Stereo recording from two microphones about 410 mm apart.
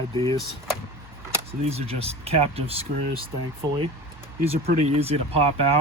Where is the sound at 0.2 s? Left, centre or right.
Centre.